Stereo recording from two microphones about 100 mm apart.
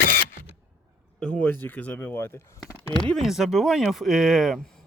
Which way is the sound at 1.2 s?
10° left (ahead or behind).